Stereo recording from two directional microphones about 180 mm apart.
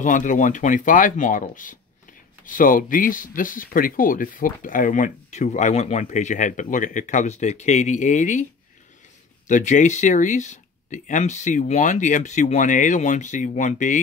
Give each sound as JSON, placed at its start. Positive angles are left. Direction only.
{"t": 0.0, "sound": "speech", "side_deg": 45}
{"t": 9.5, "sound": "speech", "side_deg": 45}